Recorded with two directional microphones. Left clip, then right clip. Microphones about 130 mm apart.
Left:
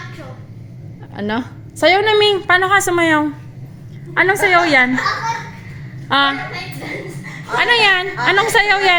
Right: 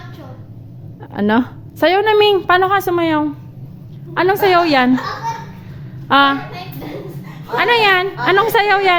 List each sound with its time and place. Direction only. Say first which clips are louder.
1.1 s a woman's voice: right 6 dB; 65° right (ahead or behind)
2.6 s a woman's voice: left 2 dB; 30° right (ahead or behind)
4.1 s a woman's voice: even; 45° right (ahead or behind)
6.1 s a woman's voice: right 3 dB; 55° right (ahead or behind)
7.5 s a woman's voice: even; 40° right (ahead or behind)